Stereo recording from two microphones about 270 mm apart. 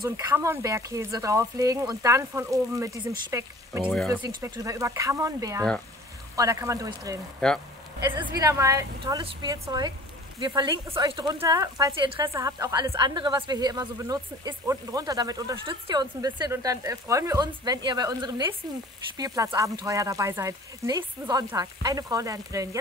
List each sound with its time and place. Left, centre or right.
0.0 s speech: centre
3.9 s speech: centre
4.2 s speech: centre
7.3 s speech: centre
8.0 s speech: centre